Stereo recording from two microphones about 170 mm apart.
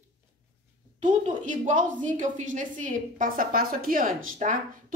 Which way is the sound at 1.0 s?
50° right (ahead or behind).